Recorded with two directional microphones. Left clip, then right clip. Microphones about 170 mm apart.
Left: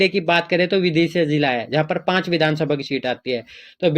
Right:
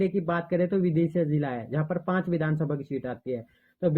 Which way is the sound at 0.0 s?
30° left (ahead or behind).